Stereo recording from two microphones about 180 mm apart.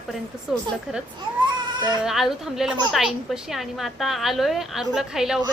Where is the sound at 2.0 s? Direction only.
Centre (ahead or behind).